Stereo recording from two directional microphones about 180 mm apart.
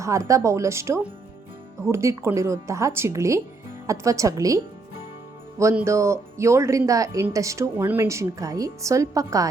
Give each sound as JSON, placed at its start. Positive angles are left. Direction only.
{"t": 0.0, "sound": "speech", "side_deg": -15}